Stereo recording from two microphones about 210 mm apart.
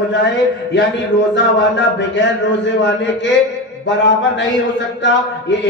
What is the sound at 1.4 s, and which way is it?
A man's voice, 55° left (ahead or behind).